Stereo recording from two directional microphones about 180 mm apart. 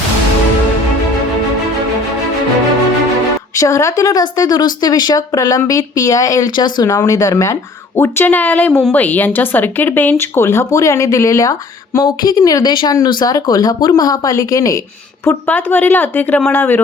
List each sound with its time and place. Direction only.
3.6 s speech: 15° left (ahead or behind)